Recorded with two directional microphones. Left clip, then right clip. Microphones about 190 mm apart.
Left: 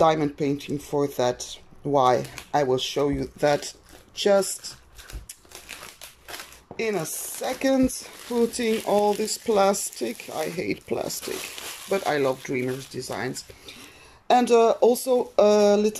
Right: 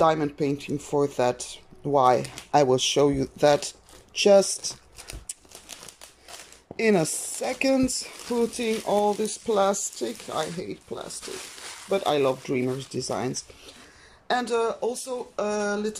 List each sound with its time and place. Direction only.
0.0 s speech: centre (ahead or behind)
6.8 s speech: 20° right (ahead or behind)
7.4 s speech: 5° right (ahead or behind); by 11.1 s 20° left (ahead or behind)
11.9 s speech: 5° right (ahead or behind)
14.2 s speech: 15° left (ahead or behind)